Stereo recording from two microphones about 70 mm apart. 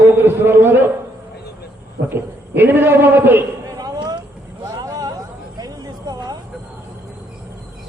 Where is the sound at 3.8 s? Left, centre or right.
Right.